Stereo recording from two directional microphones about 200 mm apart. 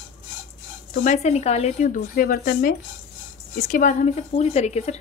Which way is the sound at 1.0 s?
30° left (ahead or behind).